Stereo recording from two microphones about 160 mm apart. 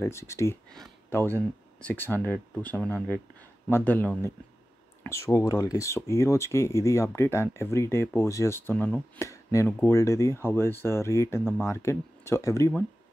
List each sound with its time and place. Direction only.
0.0 s speech: 15° left (ahead or behind)